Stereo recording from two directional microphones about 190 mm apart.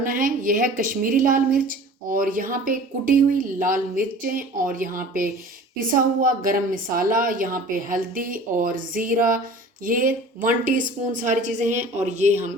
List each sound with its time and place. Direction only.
0.0 s a woman's voice: 45° right (ahead or behind)